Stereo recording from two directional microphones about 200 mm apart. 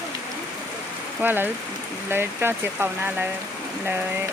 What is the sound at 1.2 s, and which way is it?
Speech, 10° right (ahead or behind).